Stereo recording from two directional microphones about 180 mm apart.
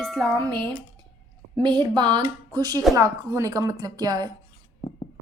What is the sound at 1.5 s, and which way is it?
A woman's voice, 25° right (ahead or behind).